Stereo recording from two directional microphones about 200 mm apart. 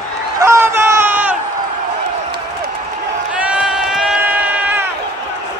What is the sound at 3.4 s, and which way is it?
Crowd, 5° right (ahead or behind).